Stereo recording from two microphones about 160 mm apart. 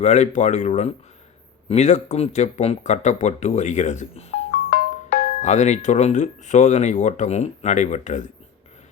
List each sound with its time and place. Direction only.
0.0 s speech: 45° left (ahead or behind)
4.5 s music: 70° left (ahead or behind)
5.4 s speech: 45° left (ahead or behind)